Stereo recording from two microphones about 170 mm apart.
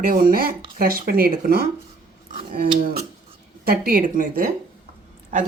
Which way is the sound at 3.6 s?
60° right (ahead or behind).